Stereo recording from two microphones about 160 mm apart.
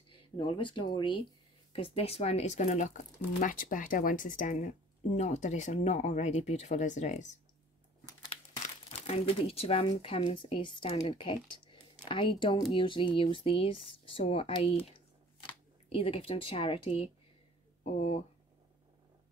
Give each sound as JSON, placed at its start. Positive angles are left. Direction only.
{"t": 0.4, "sound": "speech", "side_deg": 30}
{"t": 8.6, "sound": "speech", "side_deg": 40}